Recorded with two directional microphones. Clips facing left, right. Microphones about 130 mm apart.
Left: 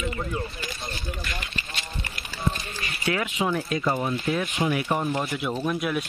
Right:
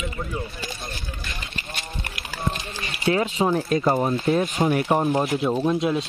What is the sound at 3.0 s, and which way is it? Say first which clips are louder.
Speech: right 5 dB; 30° right (ahead or behind).